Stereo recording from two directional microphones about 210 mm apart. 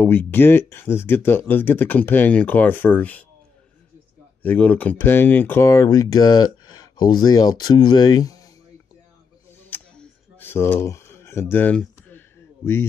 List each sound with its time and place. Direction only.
0.0 s speech: 10° left (ahead or behind)
4.4 s speech: 10° left (ahead or behind)
9.7 s a sound: 10° left (ahead or behind)